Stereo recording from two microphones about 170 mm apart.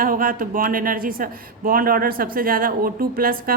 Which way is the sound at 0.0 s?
55° right (ahead or behind).